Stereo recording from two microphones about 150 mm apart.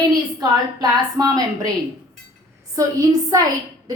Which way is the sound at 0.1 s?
25° right (ahead or behind).